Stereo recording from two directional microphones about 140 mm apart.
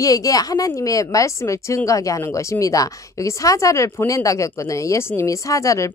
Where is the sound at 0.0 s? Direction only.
25° left (ahead or behind).